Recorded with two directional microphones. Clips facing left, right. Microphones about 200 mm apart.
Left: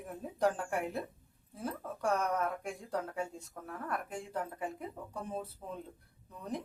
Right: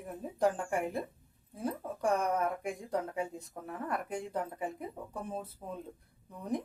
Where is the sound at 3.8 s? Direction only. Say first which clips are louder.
Right 3 dB; centre (ahead or behind).